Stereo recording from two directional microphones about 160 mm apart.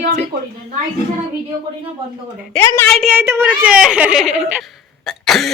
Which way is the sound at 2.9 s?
Centre (ahead or behind).